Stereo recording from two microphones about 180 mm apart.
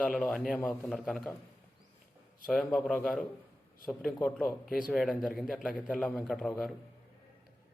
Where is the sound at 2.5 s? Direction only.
5° left (ahead or behind).